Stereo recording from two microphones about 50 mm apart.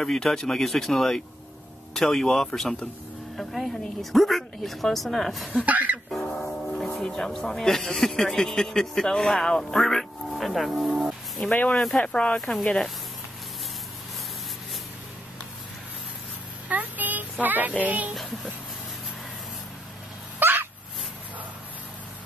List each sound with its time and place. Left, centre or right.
0.0 s a woman's voice: centre
5.6 s speech: right
6.4 s speech: centre
11.7 s speech: centre
12.0 s speech: left
12.4 s a woman's voice: centre
16.6 s a sound: right
18.1 s a sound: centre
20.3 s dog: right